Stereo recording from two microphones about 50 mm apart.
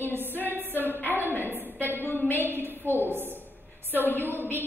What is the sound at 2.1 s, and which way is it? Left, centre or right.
Speech, left.